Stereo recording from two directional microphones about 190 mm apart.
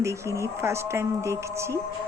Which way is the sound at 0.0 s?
15° right (ahead or behind).